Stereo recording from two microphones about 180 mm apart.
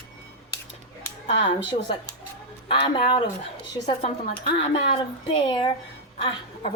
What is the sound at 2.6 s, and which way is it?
Speech, 25° left (ahead or behind).